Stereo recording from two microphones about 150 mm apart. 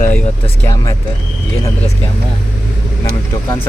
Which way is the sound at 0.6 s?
20° left (ahead or behind).